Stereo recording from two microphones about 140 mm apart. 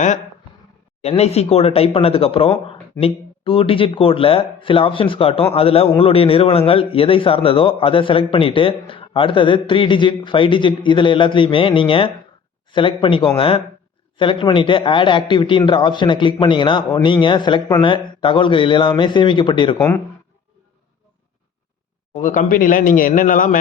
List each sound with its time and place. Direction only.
1.0 s a man's voice: 45° left (ahead or behind)
22.1 s speech: 60° left (ahead or behind)